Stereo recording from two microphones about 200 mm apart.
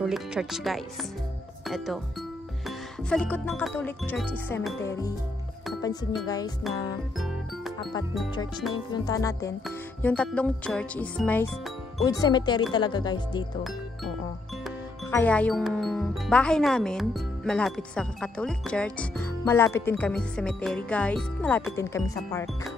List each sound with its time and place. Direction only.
0.0 s speech: centre (ahead or behind)
3.1 s music: 5° left (ahead or behind)
6.2 s speech: 20° left (ahead or behind)
8.9 s music: 20° left (ahead or behind)
9.7 s speech: 5° left (ahead or behind)
12.0 s speech: 20° left (ahead or behind)
15.0 s speech: 10° left (ahead or behind)